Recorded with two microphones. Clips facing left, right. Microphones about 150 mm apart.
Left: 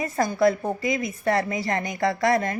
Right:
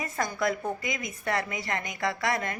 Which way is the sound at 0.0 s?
35° left (ahead or behind).